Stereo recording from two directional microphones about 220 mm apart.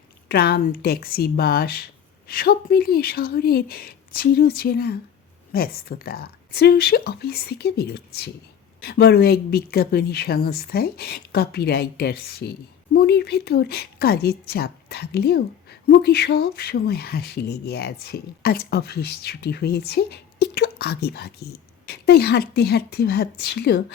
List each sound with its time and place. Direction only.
0.3 s speech: 45° left (ahead or behind)